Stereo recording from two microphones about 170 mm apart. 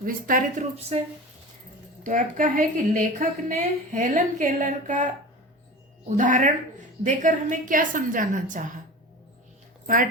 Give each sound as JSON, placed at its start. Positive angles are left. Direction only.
{"t": 0.0, "sound": "a woman's voice", "side_deg": -55}
{"t": 2.0, "sound": "a woman's voice", "side_deg": -50}
{"t": 6.1, "sound": "a woman's voice", "side_deg": -50}
{"t": 9.8, "sound": "speech", "side_deg": -50}